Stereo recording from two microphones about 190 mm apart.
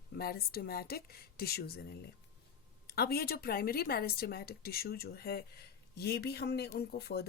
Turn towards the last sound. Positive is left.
turn(degrees=55)  # may be behind; listen again after turning